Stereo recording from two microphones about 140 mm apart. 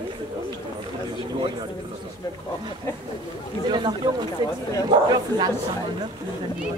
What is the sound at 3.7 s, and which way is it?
Speech, 35° right (ahead or behind).